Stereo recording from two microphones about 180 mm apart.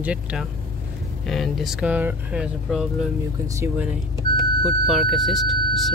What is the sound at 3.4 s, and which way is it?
Speech, 15° right (ahead or behind).